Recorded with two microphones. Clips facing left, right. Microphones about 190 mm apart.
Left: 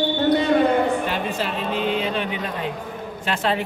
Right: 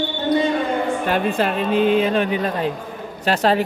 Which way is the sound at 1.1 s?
55° right (ahead or behind).